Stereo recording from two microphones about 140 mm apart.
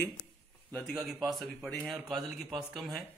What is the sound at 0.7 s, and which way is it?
Speech, centre (ahead or behind).